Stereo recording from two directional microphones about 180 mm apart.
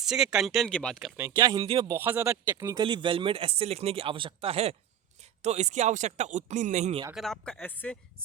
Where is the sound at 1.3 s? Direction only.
20° right (ahead or behind); by 7.0 s 40° right (ahead or behind).